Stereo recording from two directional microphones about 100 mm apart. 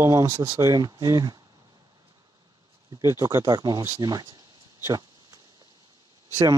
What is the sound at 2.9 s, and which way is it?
Speech, 30° right (ahead or behind).